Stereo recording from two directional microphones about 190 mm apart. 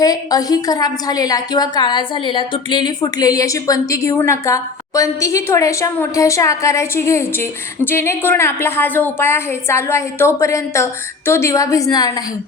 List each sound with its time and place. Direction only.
0.0 s a woman's voice: 20° left (ahead or behind)